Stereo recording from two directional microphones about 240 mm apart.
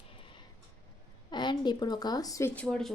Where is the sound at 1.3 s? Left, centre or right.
Centre.